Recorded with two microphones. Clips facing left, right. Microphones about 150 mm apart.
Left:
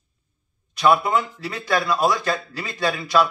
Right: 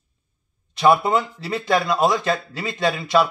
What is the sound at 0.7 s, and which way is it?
Speech, 25° right (ahead or behind).